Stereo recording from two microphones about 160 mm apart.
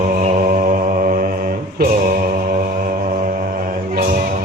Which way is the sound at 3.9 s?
65° right (ahead or behind).